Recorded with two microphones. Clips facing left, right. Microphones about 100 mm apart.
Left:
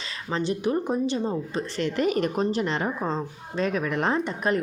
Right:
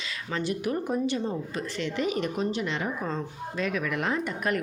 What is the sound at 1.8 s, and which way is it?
A woman's voice, 50° left (ahead or behind).